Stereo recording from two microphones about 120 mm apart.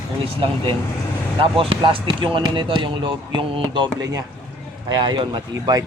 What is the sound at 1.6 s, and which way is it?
Speech, 45° right (ahead or behind).